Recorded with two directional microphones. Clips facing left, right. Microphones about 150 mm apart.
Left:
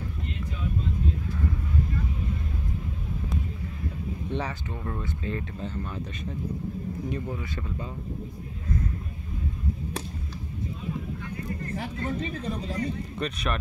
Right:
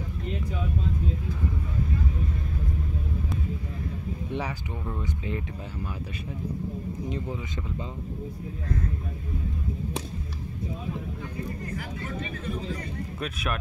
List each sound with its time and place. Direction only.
4.3 s speech: 10° right (ahead or behind)
7.1 s speech: 20° right (ahead or behind)
11.8 s speech: 30° left (ahead or behind)
13.2 s speech: 5° right (ahead or behind)